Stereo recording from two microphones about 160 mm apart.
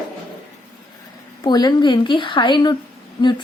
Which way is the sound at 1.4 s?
25° left (ahead or behind).